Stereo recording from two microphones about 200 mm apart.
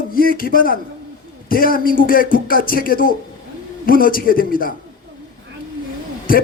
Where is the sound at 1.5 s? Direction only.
45° left (ahead or behind).